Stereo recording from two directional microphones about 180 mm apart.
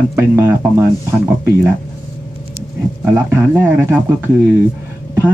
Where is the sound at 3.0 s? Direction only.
15° right (ahead or behind).